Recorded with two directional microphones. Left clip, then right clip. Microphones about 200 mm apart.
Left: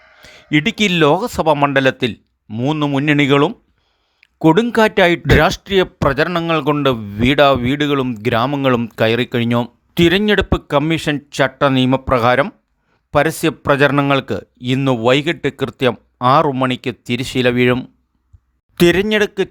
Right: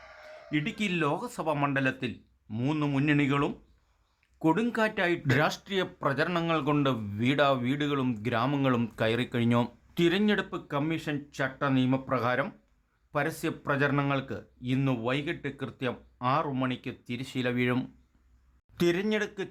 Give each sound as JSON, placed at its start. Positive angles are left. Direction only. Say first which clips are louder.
{"t": 0.5, "sound": "speech", "louder": "left 16 dB", "side_deg": 40}
{"t": 2.5, "sound": "speech", "louder": "left 12 dB", "side_deg": 25}
{"t": 3.1, "sound": "speech", "louder": "left 15 dB", "side_deg": 40}
{"t": 4.2, "sound": "a sound", "louder": "left 15 dB", "side_deg": 40}
{"t": 4.7, "sound": "speech", "louder": "left 15 dB", "side_deg": 40}